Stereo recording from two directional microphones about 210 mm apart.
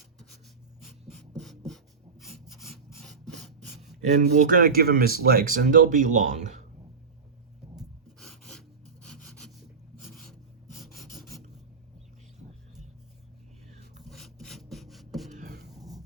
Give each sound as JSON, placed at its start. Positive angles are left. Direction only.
{"t": 1.4, "sound": "rub", "side_deg": 0}
{"t": 3.8, "sound": "speech", "side_deg": -35}
{"t": 7.8, "sound": "rub", "side_deg": 0}
{"t": 10.0, "sound": "filing", "side_deg": 0}
{"t": 14.0, "sound": "filing", "side_deg": 0}
{"t": 15.3, "sound": "a sound", "side_deg": -40}
{"t": 15.8, "sound": "dog", "side_deg": -15}